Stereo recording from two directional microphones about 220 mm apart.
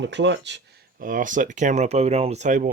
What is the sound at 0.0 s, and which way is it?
Speech, 55° right (ahead or behind).